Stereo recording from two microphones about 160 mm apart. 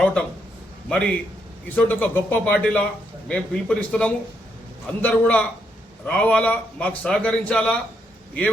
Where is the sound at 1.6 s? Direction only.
10° left (ahead or behind).